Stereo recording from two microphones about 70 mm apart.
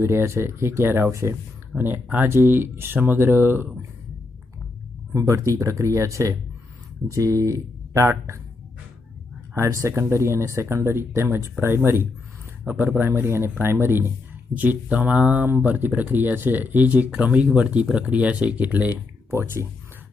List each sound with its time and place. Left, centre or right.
0.0 s speech: right
1.7 s speech: right
5.1 s speech: right
9.6 s speech: right
14.5 s speech: right
19.3 s speech: right